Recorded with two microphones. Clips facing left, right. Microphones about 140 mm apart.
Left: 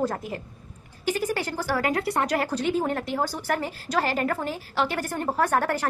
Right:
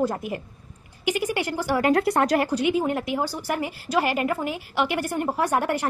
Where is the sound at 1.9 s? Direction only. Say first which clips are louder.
Right 5 dB; 40° right (ahead or behind).